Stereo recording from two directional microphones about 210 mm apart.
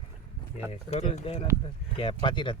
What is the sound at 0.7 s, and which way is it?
Speech, 30° left (ahead or behind).